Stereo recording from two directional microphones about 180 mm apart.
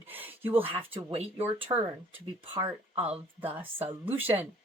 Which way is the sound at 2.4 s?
30° right (ahead or behind).